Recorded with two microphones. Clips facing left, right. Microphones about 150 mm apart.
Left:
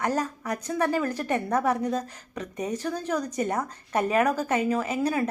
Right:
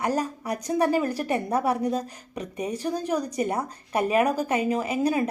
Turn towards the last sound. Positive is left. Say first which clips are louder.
# right 2 dB
turn(degrees=-15)  # may be behind; listen again after turning